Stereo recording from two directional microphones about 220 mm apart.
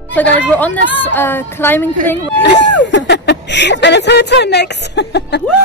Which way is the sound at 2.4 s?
55° left (ahead or behind).